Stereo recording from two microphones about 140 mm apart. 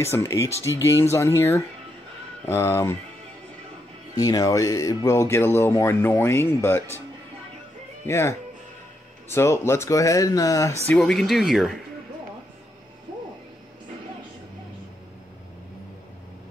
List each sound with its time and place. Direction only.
0.0 s speech: 20° left (ahead or behind)
4.2 s speech: 25° left (ahead or behind)
8.1 s speech: 20° left (ahead or behind)
10.9 s speech: 5° left (ahead or behind)